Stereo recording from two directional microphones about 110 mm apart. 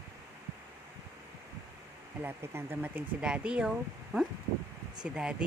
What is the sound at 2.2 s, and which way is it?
Speech, 20° right (ahead or behind).